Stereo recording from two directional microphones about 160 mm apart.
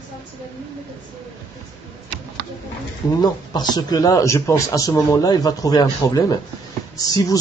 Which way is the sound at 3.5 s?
25° left (ahead or behind).